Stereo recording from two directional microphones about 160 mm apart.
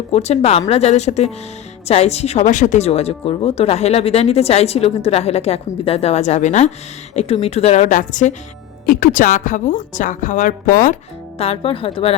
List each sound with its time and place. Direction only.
0.1 s a woman's voice: 40° left (ahead or behind); by 10.9 s 55° left (ahead or behind)
11.3 s speech: 40° left (ahead or behind)